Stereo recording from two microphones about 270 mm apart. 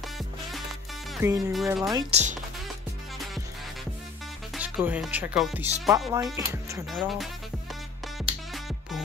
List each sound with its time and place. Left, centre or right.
1.1 s speech: centre
2.0 s speech: right
4.6 s speech: centre
6.9 s speech: centre